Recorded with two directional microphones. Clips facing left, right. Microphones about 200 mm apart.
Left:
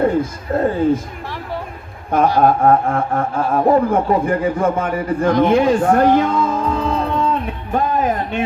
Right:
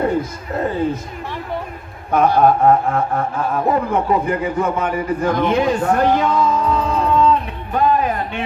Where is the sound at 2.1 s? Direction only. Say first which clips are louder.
Even; 50° left (ahead or behind).